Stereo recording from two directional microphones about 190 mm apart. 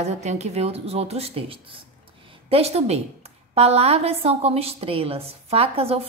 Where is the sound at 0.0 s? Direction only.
35° right (ahead or behind).